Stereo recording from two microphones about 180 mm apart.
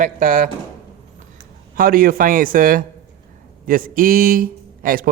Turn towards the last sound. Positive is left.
turn(degrees=-50)  # may be behind; listen again after turning